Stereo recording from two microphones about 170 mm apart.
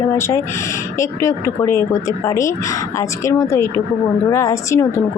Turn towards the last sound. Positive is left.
turn(degrees=15)  # may be behind; listen again after turning